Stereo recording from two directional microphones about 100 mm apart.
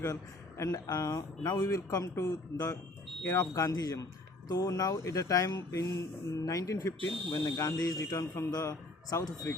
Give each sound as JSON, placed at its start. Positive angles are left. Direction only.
{"t": 0.0, "sound": "speech", "side_deg": 30}